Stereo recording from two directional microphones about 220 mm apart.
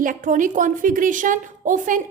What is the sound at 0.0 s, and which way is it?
A woman's voice, 35° right (ahead or behind).